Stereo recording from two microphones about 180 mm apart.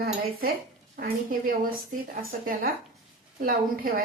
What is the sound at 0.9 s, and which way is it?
A woman's voice, 55° right (ahead or behind).